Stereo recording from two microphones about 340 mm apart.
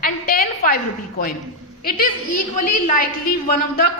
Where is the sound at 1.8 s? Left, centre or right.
Left.